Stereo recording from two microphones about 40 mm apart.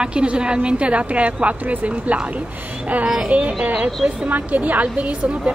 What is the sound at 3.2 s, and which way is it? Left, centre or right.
A woman's voice, right.